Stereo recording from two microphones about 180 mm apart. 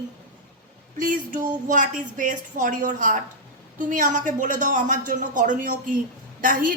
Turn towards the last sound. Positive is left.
turn(degrees=-50)  # may be behind; listen again after turning